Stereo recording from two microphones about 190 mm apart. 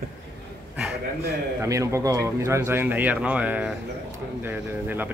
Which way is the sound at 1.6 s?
15° right (ahead or behind).